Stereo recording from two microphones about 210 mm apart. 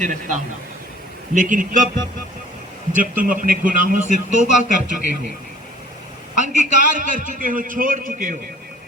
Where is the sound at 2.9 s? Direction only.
40° right (ahead or behind).